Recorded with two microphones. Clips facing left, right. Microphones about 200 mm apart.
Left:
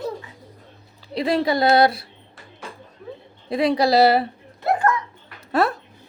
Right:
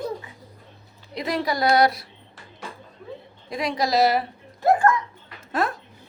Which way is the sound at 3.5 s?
30° left (ahead or behind).